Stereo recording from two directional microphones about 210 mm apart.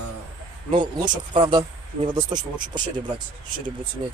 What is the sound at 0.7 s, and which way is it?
Speech, 35° right (ahead or behind).